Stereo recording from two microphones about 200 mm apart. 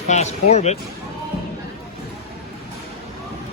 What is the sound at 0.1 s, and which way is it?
Speech, 35° left (ahead or behind).